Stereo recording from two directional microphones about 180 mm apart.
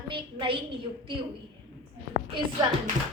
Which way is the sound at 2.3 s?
25° right (ahead or behind).